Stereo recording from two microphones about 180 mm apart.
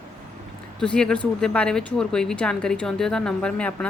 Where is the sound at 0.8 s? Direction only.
5° left (ahead or behind).